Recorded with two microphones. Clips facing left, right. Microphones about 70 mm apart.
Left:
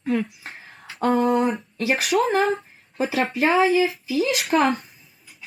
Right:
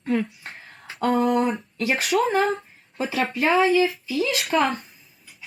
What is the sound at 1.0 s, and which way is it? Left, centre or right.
Speech, centre.